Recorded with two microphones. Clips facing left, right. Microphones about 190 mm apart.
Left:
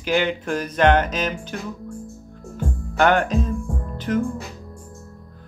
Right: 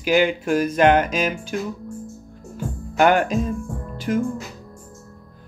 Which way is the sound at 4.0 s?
10° right (ahead or behind).